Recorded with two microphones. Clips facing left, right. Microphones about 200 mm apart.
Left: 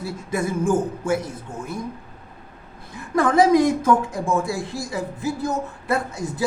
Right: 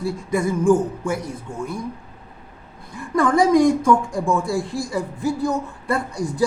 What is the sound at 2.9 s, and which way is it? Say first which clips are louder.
A woman's voice: even; 20° left (ahead or behind).